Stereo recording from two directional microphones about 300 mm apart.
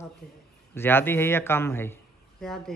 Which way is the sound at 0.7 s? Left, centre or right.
Centre.